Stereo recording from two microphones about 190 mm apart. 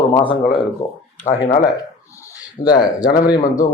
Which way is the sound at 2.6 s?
20° left (ahead or behind).